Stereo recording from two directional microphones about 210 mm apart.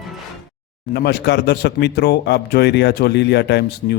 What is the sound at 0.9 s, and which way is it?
Speech, 50° left (ahead or behind).